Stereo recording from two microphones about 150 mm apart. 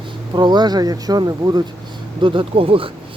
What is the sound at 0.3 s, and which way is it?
Speech, 30° right (ahead or behind).